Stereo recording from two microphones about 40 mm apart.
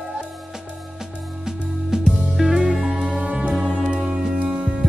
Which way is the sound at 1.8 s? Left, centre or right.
Centre.